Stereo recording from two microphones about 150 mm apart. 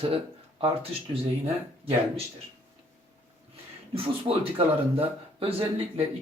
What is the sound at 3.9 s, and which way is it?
A man's voice, 40° right (ahead or behind).